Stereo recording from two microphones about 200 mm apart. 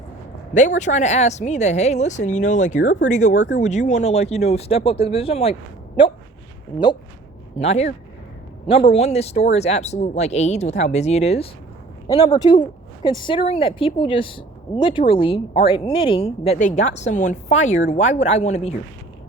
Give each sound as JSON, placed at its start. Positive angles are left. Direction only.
{"t": 0.5, "sound": "speech", "side_deg": 35}
{"t": 7.6, "sound": "speech", "side_deg": 35}
{"t": 12.0, "sound": "a woman's voice", "side_deg": 20}